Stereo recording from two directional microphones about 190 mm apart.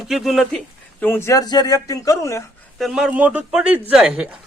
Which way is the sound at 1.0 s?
10° left (ahead or behind).